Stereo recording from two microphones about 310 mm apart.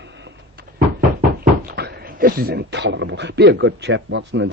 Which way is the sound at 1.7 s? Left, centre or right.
Right.